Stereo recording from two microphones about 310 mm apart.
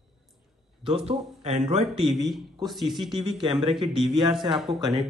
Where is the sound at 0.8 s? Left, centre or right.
Centre.